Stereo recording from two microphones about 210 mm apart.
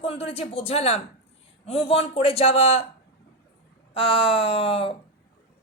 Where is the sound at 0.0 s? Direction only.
25° left (ahead or behind).